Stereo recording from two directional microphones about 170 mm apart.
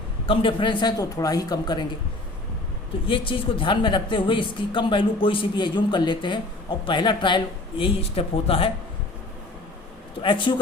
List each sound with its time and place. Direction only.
0.3 s a woman's voice: 30° left (ahead or behind)
3.1 s a woman's voice: 30° left (ahead or behind)
10.2 s a woman's voice: 30° left (ahead or behind)